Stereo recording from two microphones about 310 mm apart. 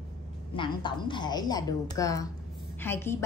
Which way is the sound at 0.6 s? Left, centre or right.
Centre.